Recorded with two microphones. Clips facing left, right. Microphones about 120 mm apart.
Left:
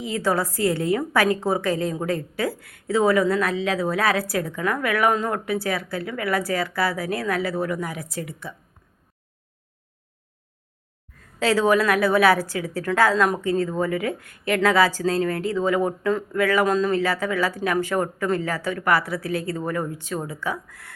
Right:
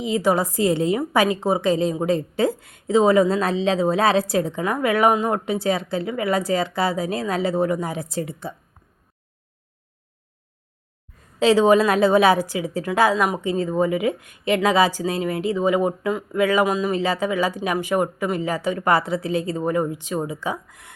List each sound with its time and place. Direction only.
0.0 s a woman's voice: 15° right (ahead or behind)
11.2 s a woman's voice: 20° right (ahead or behind)